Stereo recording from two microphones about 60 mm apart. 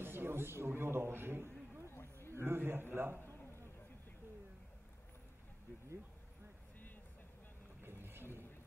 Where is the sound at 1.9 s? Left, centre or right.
Left.